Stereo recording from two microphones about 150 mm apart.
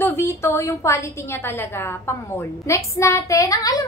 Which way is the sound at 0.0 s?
15° left (ahead or behind).